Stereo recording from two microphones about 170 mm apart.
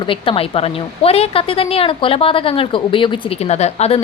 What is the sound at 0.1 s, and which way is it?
A woman's voice, 35° left (ahead or behind).